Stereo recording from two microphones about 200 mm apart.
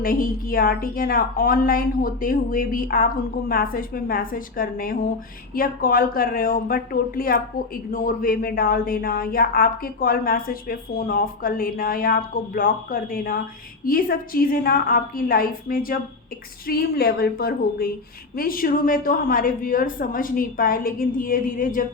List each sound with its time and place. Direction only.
0.0 s speech: 45° left (ahead or behind)